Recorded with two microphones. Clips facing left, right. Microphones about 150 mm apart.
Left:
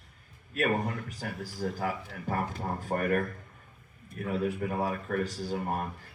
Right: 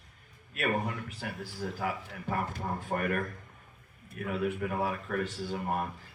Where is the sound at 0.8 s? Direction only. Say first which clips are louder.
Left 1 dB; 40° left (ahead or behind).